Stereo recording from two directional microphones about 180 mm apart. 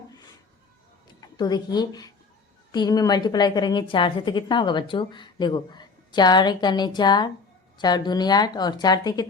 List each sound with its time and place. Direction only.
1.4 s a woman's voice: 25° left (ahead or behind)